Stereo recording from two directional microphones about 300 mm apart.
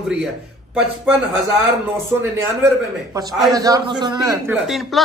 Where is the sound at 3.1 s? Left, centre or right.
Centre.